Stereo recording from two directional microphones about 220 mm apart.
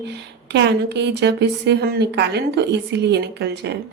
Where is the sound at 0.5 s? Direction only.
50° right (ahead or behind).